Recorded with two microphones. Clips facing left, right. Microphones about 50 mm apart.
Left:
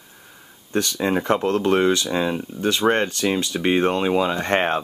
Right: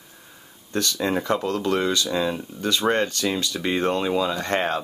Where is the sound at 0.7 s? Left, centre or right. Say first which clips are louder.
Left 2 dB; left.